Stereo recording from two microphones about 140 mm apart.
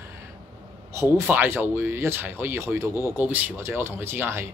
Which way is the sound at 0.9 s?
20° right (ahead or behind).